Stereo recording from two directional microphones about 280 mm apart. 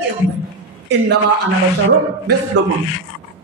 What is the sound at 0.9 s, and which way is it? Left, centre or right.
Speech, right.